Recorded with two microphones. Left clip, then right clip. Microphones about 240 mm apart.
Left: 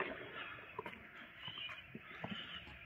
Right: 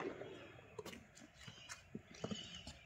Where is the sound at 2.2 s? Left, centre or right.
Centre.